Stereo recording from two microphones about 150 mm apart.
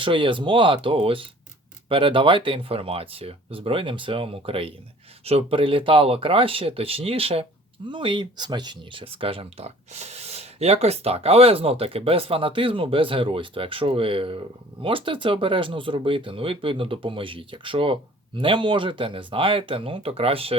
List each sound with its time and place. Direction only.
0.0 s speech: 35° right (ahead or behind)